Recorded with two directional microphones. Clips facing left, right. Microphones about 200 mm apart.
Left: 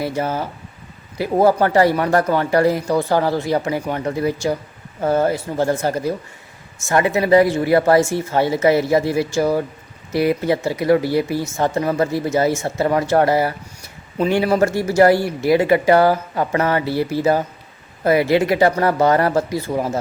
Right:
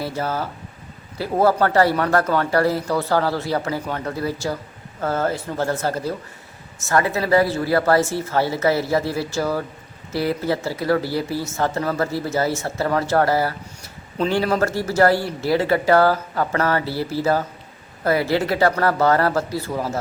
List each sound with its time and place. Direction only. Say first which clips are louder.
0.0 s speech: left 3 dB; 15° left (ahead or behind)